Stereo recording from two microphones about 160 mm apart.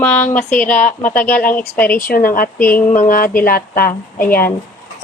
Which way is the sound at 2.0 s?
60° left (ahead or behind).